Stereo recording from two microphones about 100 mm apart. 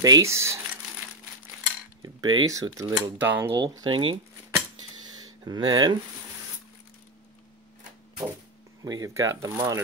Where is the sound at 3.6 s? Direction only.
50° right (ahead or behind).